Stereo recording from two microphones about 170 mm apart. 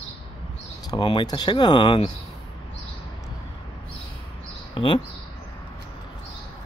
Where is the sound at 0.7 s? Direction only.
25° left (ahead or behind).